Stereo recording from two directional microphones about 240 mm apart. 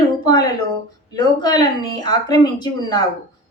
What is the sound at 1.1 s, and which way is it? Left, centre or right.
Speech, centre.